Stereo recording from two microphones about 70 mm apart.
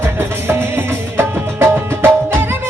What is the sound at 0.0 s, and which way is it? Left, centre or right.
Music, right.